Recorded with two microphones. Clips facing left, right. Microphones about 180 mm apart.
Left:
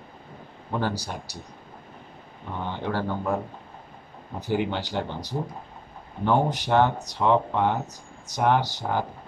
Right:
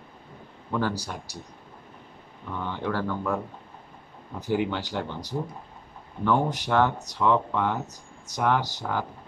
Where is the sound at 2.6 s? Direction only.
30° left (ahead or behind).